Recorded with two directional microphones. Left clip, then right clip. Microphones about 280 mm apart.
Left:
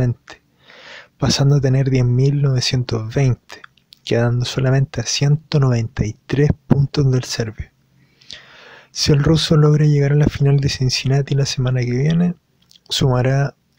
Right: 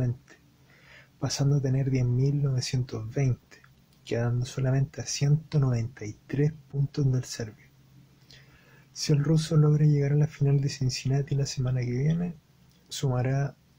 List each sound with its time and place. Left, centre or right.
0.0 s speech: left